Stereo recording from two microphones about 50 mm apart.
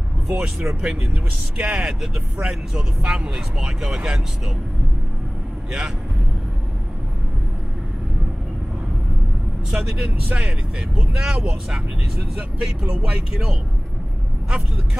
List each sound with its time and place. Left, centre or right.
0.3 s speech: centre
5.7 s speech: centre
9.7 s speech: centre
10.2 s speech: right
11.1 s speech: centre
12.4 s speech: right